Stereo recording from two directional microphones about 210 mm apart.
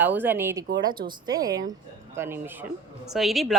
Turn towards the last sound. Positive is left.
turn(degrees=0)  # may be behind; listen again after turning